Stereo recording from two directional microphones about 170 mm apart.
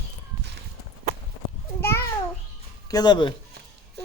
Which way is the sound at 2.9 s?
25° left (ahead or behind).